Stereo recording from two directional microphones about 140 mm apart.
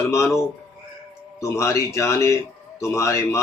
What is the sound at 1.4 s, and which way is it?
Speech, 20° left (ahead or behind).